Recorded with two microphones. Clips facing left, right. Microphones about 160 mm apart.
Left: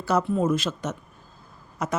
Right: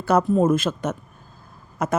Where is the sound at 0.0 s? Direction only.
50° right (ahead or behind).